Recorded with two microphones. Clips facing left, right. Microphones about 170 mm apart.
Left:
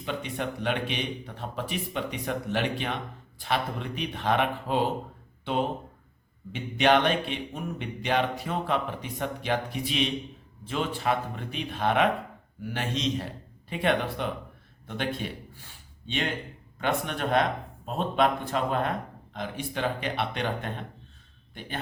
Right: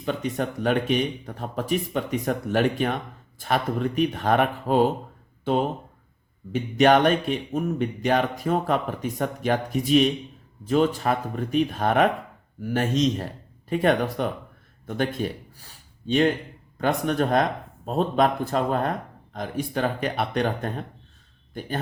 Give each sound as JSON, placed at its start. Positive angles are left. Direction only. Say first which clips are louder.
{"t": 0.0, "sound": "speech", "louder": "right 5 dB", "side_deg": -45}
{"t": 6.5, "sound": "a man's voice", "louder": "right 5 dB", "side_deg": -45}